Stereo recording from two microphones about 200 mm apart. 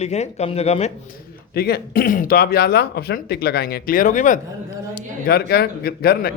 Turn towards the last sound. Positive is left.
turn(degrees=50)  # may be behind; listen again after turning